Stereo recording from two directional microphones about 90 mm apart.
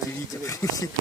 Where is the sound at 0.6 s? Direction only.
35° left (ahead or behind).